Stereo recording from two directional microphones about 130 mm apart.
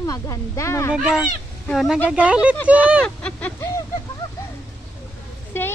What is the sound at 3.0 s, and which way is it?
Speech, 10° left (ahead or behind).